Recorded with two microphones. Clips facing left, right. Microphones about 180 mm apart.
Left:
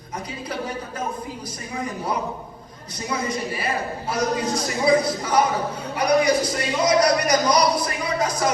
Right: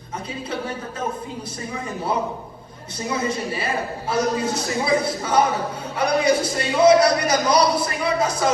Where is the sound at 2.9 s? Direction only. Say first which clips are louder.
Right 2 dB; 25° right (ahead or behind).